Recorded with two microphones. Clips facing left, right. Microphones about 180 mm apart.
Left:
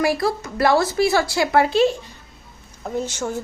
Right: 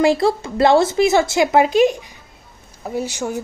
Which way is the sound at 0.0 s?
25° right (ahead or behind).